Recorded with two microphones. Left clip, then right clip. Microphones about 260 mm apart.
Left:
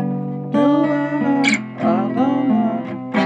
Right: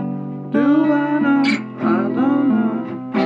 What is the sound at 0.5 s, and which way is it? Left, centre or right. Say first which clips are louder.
Music: even; left.